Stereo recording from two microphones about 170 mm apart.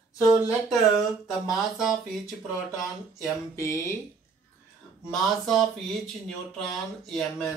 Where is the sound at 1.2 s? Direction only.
Centre (ahead or behind).